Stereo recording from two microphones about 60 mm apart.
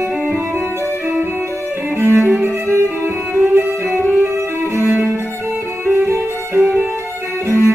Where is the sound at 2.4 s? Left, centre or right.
Right.